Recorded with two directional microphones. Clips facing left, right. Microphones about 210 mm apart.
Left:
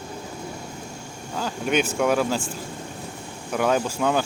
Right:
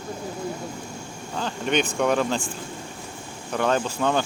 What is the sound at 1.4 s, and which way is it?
Speech, 5° left (ahead or behind).